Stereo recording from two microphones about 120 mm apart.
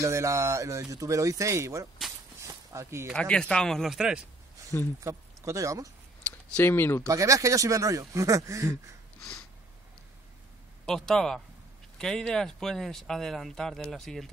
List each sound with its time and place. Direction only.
0.0 s speech: 25° right (ahead or behind)
2.4 s a sound: 25° right (ahead or behind)
3.1 s speech: 5° left (ahead or behind)
5.0 s speech: 25° right (ahead or behind)
6.5 s speech: 20° left (ahead or behind)
7.1 s speech: 25° right (ahead or behind)
10.9 s speech: 5° left (ahead or behind)